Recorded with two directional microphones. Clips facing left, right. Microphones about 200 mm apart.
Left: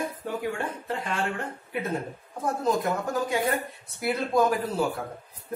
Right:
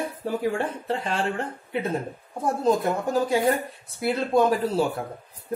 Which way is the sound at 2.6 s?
30° right (ahead or behind).